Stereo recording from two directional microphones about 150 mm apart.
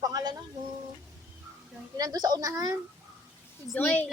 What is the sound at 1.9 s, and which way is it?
Speech, 25° right (ahead or behind).